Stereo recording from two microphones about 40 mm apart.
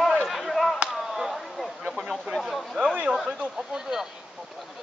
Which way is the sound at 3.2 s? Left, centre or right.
Right.